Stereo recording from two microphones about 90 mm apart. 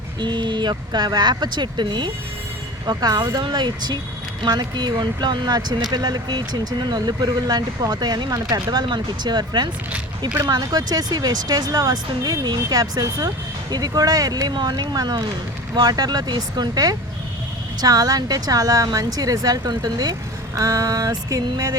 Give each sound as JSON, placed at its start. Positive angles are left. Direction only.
{"t": 0.2, "sound": "speech", "side_deg": -60}
{"t": 2.8, "sound": "speech", "side_deg": -50}
{"t": 20.6, "sound": "a sound", "side_deg": -40}